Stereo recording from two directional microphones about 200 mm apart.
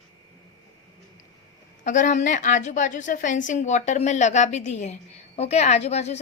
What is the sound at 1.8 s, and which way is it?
A woman's voice, 40° left (ahead or behind).